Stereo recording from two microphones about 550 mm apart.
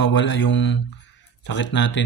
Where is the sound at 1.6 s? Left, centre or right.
Left.